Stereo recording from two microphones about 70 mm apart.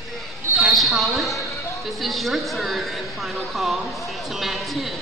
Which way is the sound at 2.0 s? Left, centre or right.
Centre.